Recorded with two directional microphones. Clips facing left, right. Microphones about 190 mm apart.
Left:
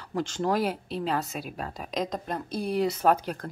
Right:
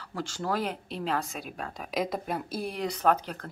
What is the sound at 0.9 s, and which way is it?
A woman's voice, centre (ahead or behind).